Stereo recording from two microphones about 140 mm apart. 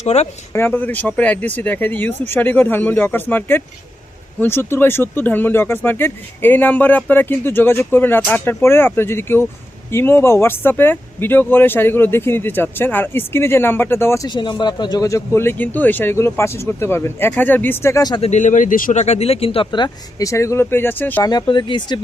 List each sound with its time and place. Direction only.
0.0 s speech: 50° left (ahead or behind)
0.5 s speech: 15° left (ahead or behind)
14.3 s speech: 30° left (ahead or behind)
18.3 s speech: 60° left (ahead or behind); by 21.2 s 15° left (ahead or behind)
21.2 s speech: 30° left (ahead or behind)